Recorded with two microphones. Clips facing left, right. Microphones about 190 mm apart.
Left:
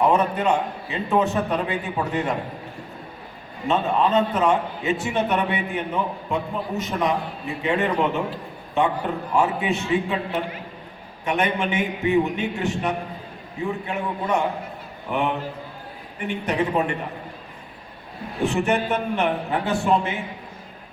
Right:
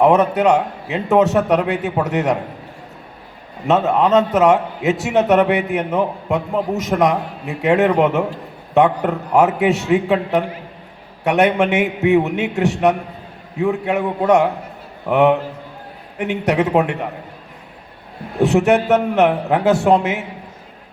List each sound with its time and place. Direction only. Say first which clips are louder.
0.0 s a man's voice: right 7 dB; 75° right (ahead or behind)
3.7 s a man's voice: right 6 dB; 75° right (ahead or behind)
18.4 s a man's voice: right 7 dB; 80° right